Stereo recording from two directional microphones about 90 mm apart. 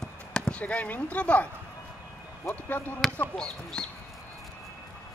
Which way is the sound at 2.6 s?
20° left (ahead or behind).